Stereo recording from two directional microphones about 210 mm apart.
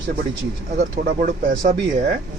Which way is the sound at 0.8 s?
40° right (ahead or behind).